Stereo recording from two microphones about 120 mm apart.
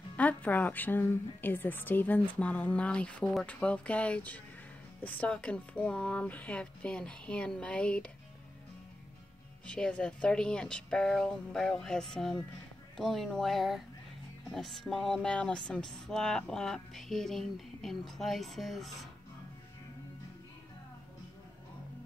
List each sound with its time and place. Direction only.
0.2 s speech: 15° left (ahead or behind)
9.7 s speech: 5° left (ahead or behind)